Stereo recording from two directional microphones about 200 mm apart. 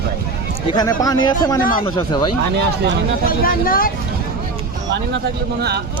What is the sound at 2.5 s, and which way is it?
Speech, 55° right (ahead or behind).